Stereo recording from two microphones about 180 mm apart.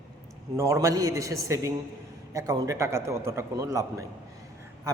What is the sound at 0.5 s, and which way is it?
A man's voice, 15° right (ahead or behind).